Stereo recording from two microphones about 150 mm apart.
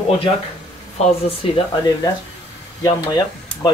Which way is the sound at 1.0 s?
40° left (ahead or behind).